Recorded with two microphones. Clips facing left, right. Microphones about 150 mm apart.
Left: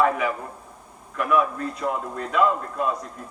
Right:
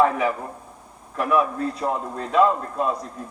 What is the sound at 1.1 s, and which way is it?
A man's voice, 35° right (ahead or behind).